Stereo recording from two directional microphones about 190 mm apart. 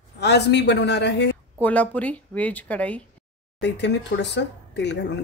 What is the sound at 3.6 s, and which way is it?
Speech, 65° left (ahead or behind).